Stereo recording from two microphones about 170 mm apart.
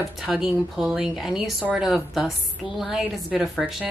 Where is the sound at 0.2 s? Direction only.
Centre (ahead or behind).